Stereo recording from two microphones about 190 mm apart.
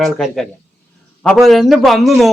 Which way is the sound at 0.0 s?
Centre (ahead or behind).